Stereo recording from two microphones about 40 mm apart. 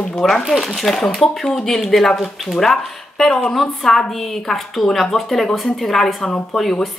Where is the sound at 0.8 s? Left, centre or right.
Centre.